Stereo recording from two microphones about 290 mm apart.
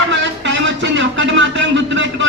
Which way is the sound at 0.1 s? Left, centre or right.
Right.